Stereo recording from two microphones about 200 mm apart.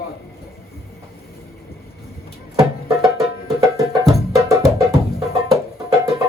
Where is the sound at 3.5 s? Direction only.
15° right (ahead or behind).